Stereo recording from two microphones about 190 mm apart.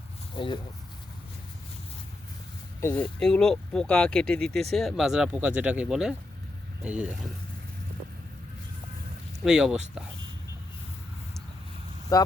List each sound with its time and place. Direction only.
0.3 s speech: 25° left (ahead or behind)
2.8 s speech: 10° left (ahead or behind); by 7.3 s 5° right (ahead or behind)
9.4 s speech: centre (ahead or behind)
12.1 s speech: 20° left (ahead or behind)